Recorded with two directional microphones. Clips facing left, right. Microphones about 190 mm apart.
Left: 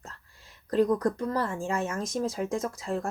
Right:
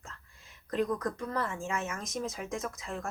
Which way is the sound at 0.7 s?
35° left (ahead or behind).